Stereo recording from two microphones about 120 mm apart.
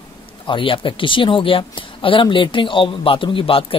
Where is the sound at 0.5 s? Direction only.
45° left (ahead or behind).